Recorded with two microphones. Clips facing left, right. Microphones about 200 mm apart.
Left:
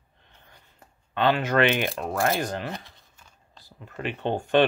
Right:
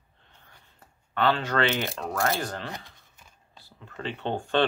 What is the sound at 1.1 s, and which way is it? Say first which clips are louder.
Speech: left 3 dB; 15° left (ahead or behind).